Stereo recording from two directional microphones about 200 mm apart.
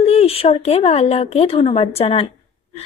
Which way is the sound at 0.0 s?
30° left (ahead or behind).